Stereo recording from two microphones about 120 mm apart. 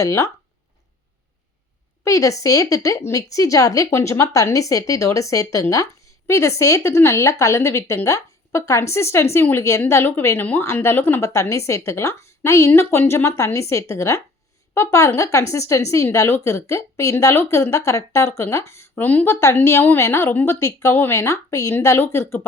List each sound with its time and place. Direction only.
0.0 s a woman's voice: 25° left (ahead or behind)
2.0 s a woman's voice: 25° left (ahead or behind)